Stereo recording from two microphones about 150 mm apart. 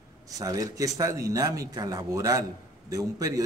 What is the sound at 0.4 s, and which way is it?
A man's voice, 25° right (ahead or behind).